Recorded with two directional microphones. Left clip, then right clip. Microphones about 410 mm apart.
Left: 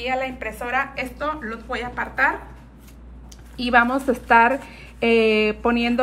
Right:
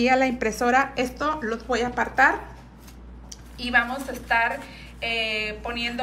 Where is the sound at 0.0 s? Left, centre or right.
Right.